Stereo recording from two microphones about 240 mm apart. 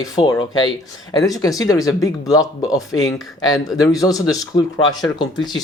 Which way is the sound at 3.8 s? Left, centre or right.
Centre.